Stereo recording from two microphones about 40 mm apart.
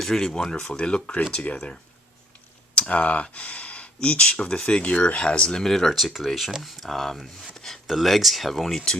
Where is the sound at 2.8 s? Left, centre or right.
Left.